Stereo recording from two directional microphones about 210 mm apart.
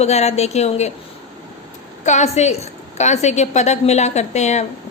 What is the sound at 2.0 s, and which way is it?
A woman's voice, 35° left (ahead or behind).